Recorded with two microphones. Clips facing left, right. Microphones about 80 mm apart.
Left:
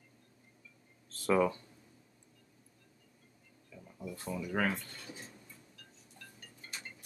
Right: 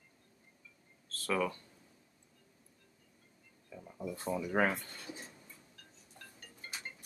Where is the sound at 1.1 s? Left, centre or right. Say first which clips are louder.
Left 5 dB; centre.